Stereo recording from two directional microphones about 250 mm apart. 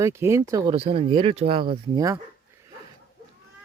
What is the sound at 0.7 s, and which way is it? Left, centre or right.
Speech, right.